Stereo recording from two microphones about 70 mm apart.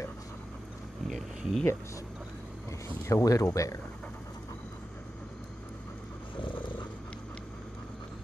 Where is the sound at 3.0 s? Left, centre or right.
Left.